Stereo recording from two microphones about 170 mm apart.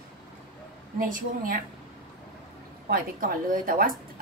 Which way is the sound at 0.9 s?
55° right (ahead or behind).